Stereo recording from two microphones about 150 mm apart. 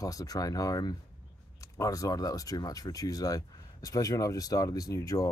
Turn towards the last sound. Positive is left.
turn(degrees=20)  # may be behind; listen again after turning